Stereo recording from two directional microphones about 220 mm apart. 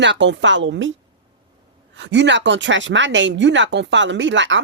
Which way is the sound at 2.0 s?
55° right (ahead or behind).